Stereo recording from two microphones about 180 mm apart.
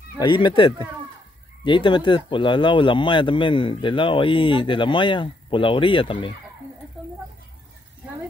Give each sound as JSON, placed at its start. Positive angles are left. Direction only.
{"t": 0.2, "sound": "speech", "side_deg": 25}